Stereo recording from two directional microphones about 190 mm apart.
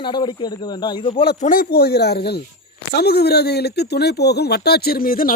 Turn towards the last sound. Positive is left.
turn(degrees=50)  # may be behind; listen again after turning